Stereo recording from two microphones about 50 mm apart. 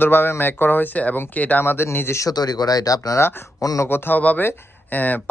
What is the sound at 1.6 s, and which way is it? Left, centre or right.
Speech, left.